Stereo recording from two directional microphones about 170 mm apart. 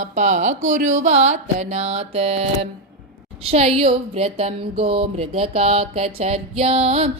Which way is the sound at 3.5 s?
35° right (ahead or behind).